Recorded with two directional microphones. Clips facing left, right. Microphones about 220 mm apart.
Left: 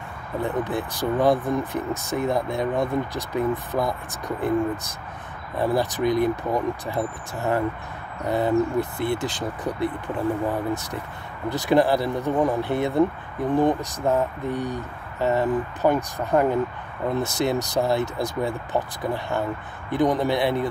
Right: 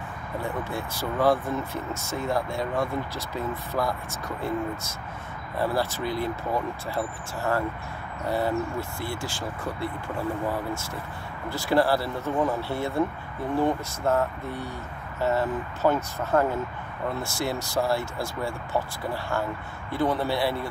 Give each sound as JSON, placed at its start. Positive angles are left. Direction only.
{"t": 0.4, "sound": "speech", "side_deg": 20}